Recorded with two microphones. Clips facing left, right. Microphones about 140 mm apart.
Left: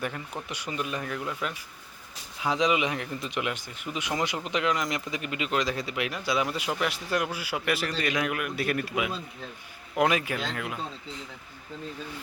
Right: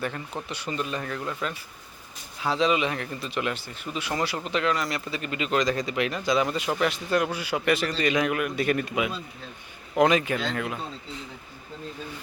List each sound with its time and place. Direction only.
0.4 s a man's voice: 10° left (ahead or behind)